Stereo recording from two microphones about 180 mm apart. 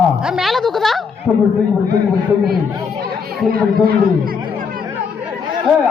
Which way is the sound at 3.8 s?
55° right (ahead or behind).